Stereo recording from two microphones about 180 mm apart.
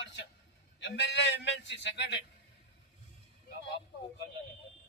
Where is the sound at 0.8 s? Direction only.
80° left.